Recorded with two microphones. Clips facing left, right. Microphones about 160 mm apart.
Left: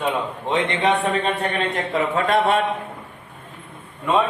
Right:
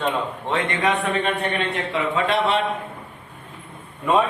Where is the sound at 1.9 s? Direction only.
45° left (ahead or behind).